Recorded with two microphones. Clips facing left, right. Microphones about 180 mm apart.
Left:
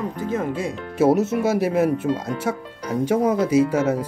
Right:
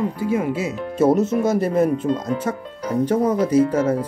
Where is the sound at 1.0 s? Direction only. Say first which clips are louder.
Right 1 dB; 10° left (ahead or behind).